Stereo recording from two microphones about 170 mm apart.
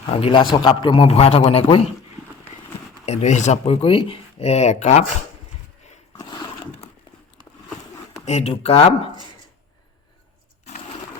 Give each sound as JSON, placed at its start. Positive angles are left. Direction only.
{"t": 0.0, "sound": "speech", "side_deg": 35}
{"t": 3.1, "sound": "speech", "side_deg": 40}
{"t": 6.1, "sound": "a sound", "side_deg": 25}
{"t": 8.2, "sound": "speech", "side_deg": 40}